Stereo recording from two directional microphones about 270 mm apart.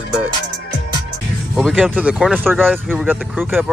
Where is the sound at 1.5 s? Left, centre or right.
Centre.